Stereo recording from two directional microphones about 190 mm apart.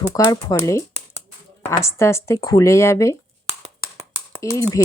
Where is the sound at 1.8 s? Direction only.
15° left (ahead or behind).